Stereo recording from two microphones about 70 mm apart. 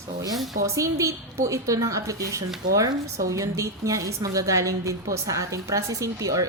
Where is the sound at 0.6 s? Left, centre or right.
Right.